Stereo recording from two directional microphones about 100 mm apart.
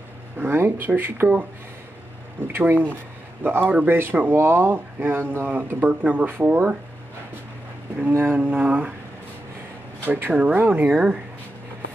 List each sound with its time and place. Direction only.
0.4 s speech: 20° right (ahead or behind)
2.4 s speech: 20° right (ahead or behind)
8.1 s speech: 20° right (ahead or behind)
10.0 s speech: 20° right (ahead or behind)